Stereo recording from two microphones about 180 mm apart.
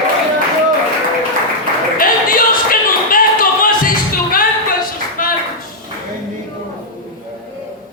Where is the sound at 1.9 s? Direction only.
50° left (ahead or behind).